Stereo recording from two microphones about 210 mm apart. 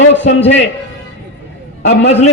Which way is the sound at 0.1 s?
60° left (ahead or behind).